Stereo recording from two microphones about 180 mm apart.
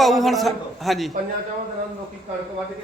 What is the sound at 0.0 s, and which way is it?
A man's voice, centre (ahead or behind).